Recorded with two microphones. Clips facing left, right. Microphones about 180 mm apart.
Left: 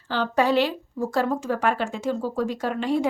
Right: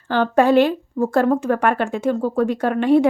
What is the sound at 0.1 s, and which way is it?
A woman's voice, 55° right (ahead or behind).